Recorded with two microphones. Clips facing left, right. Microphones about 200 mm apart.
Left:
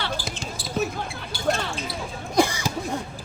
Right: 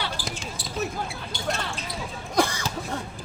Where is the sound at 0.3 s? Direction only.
Centre (ahead or behind).